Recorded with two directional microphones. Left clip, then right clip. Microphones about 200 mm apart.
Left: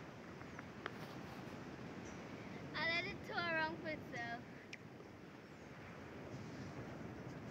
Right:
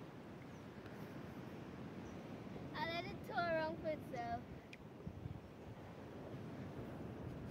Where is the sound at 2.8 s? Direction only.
65° right (ahead or behind).